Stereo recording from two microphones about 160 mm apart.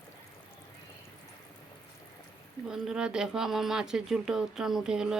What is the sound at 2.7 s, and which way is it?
Speech, 5° right (ahead or behind).